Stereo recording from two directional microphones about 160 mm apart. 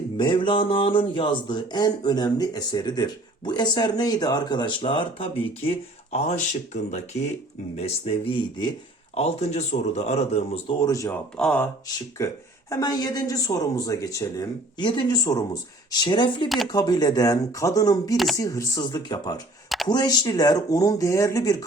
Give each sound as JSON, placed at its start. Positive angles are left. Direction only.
{"t": 0.2, "sound": "speech", "side_deg": 30}
{"t": 7.8, "sound": "speech", "side_deg": 35}
{"t": 9.1, "sound": "speech", "side_deg": 40}
{"t": 10.8, "sound": "speech", "side_deg": 20}
{"t": 11.1, "sound": "speech", "side_deg": 5}
{"t": 12.2, "sound": "speech", "side_deg": 20}